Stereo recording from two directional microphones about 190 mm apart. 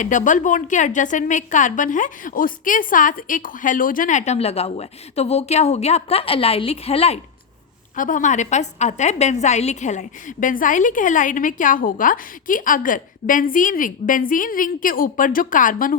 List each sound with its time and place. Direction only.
0.0 s a woman's voice: 40° left (ahead or behind)
7.9 s a woman's voice: 45° left (ahead or behind)